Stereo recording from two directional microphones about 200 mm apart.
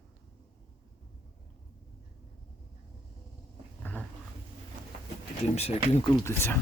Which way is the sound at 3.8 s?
5° left (ahead or behind).